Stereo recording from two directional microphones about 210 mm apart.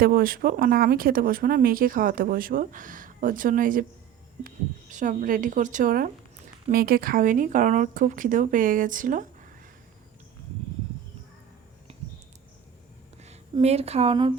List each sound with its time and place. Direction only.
0.0 s speech: 45° right (ahead or behind)
13.2 s a woman's voice: 30° right (ahead or behind)